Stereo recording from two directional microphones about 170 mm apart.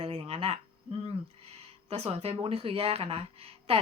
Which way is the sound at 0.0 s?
35° right (ahead or behind).